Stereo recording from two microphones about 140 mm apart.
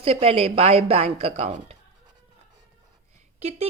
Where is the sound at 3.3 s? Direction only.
50° right (ahead or behind).